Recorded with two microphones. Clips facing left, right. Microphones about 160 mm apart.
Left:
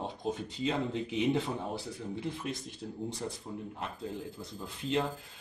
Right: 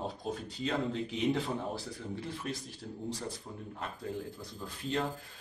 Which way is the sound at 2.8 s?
20° left (ahead or behind).